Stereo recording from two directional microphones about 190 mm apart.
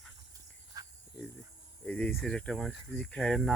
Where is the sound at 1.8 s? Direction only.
5° left (ahead or behind).